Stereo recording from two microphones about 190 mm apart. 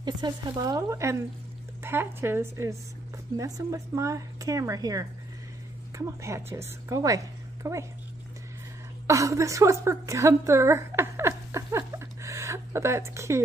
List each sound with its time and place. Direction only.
0.0 s a woman's voice: 20° right (ahead or behind)
9.0 s a woman's voice: 15° right (ahead or behind)